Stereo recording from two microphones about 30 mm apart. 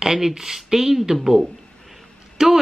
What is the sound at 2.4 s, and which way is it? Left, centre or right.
Speech, centre.